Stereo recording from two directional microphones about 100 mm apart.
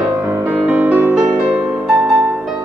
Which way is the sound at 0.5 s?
15° right (ahead or behind).